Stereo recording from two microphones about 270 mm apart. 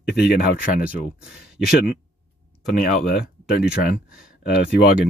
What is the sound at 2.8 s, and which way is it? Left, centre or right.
Speech, left.